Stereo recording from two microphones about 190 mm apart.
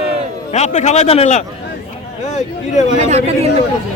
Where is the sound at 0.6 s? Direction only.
35° left (ahead or behind).